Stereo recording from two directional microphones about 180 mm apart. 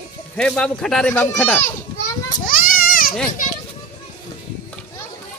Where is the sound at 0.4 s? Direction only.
5° left (ahead or behind).